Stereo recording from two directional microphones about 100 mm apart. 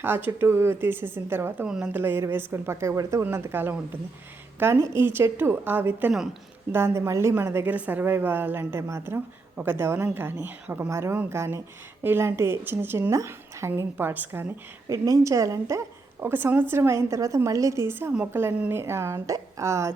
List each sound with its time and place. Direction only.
0.0 s a woman's voice: 20° right (ahead or behind)
1.6 s a woman's voice: 10° right (ahead or behind)
14.8 s a woman's voice: 35° right (ahead or behind)